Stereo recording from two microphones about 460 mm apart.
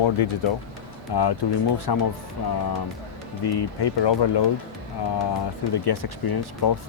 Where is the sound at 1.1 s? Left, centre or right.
Left.